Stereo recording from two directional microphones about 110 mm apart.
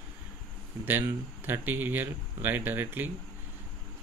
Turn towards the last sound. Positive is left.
turn(degrees=-20)  # may be behind; listen again after turning